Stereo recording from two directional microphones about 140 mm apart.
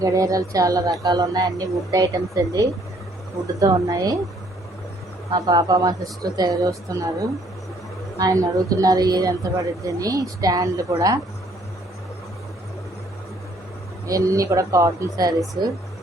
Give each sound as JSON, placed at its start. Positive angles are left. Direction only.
{"t": 0.0, "sound": "a woman's voice", "side_deg": -25}
{"t": 5.3, "sound": "a woman's voice", "side_deg": -30}
{"t": 14.1, "sound": "a woman's voice", "side_deg": -25}